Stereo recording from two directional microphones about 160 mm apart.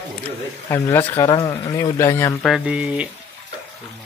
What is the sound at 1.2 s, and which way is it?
Speech, 25° left (ahead or behind).